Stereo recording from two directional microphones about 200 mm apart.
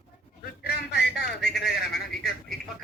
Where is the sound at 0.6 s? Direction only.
55° left (ahead or behind).